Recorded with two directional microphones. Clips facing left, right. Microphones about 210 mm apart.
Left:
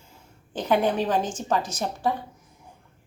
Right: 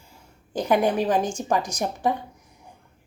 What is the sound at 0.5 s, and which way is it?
A woman's voice, 10° right (ahead or behind).